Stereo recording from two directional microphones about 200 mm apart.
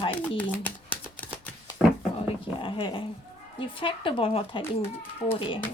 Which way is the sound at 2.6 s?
25° left (ahead or behind).